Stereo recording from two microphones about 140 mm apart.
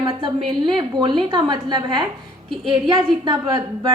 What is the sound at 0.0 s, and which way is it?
A woman's voice, 35° right (ahead or behind).